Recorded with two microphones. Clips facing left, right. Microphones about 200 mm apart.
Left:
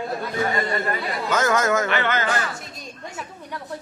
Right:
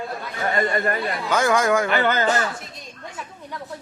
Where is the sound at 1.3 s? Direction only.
10° right (ahead or behind).